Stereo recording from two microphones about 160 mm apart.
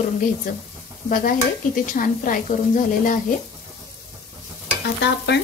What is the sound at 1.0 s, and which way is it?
Speech, 60° left (ahead or behind).